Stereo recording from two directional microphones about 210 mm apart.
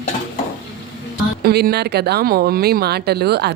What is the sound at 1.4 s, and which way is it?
Speech, 50° right (ahead or behind).